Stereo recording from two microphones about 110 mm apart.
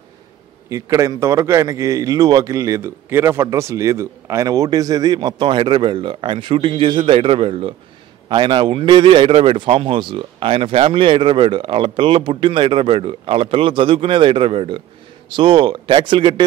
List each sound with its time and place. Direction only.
0.7 s a man's voice: 30° right (ahead or behind); by 7.7 s 55° right (ahead or behind)
8.3 s speech: 45° right (ahead or behind)